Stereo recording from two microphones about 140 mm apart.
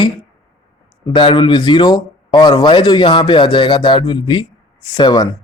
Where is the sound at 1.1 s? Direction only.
35° left (ahead or behind).